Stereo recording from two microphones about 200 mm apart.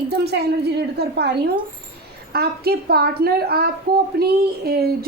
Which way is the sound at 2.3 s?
50° right (ahead or behind).